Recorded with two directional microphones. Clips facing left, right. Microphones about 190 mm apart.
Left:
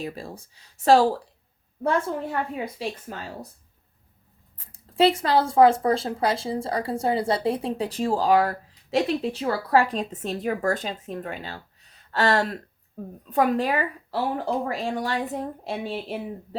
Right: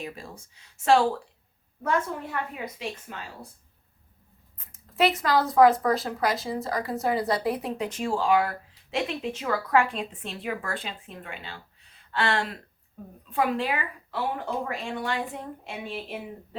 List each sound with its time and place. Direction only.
0.0 s speech: 35° left (ahead or behind)
4.5 s speech: 30° left (ahead or behind)